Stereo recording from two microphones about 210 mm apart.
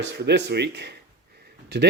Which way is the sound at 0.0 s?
55° right (ahead or behind).